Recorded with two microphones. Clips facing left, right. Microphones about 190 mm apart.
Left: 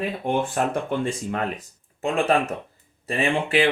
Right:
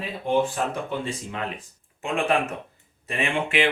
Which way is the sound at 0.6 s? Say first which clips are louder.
Left 4 dB; 55° left (ahead or behind).